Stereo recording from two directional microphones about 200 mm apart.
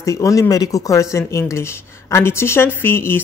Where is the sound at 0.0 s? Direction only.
15° left (ahead or behind).